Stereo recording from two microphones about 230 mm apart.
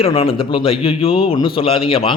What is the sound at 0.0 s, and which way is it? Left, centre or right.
A man's voice, left.